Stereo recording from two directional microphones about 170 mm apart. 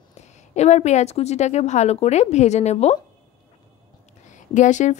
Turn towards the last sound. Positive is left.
turn(degrees=45)  # may be behind; listen again after turning